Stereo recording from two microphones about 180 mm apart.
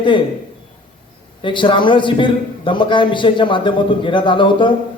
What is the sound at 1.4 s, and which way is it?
A man's voice, 25° left (ahead or behind).